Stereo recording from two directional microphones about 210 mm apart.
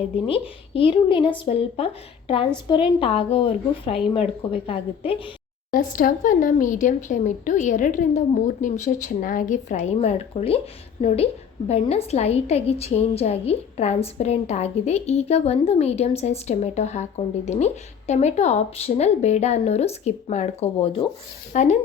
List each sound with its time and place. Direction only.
0.3 s speech: 25° left (ahead or behind)
5.7 s a woman's voice: 40° left (ahead or behind)